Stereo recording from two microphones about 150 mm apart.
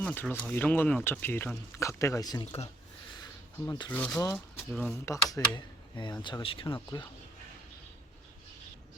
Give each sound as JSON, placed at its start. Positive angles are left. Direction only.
{"t": 0.0, "sound": "speech", "side_deg": 10}
{"t": 3.7, "sound": "speech", "side_deg": 25}
{"t": 3.9, "sound": "speech", "side_deg": 10}
{"t": 5.0, "sound": "speech", "side_deg": 20}